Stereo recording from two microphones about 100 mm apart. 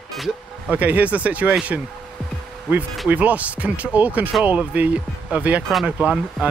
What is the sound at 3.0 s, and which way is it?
Speech, 15° right (ahead or behind).